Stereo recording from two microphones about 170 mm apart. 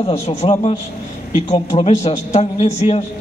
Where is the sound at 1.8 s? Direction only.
40° left (ahead or behind).